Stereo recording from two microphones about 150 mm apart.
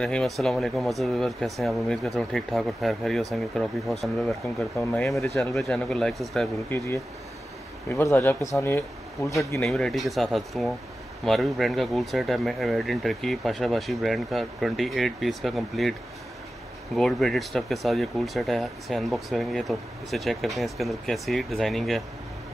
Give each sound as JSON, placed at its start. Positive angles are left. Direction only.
{"t": 0.0, "sound": "speech", "side_deg": 5}
{"t": 7.9, "sound": "speech", "side_deg": 15}
{"t": 9.7, "sound": "speech", "side_deg": 0}